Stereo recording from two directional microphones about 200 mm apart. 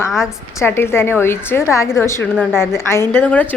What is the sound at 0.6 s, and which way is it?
A woman's voice, 15° left (ahead or behind).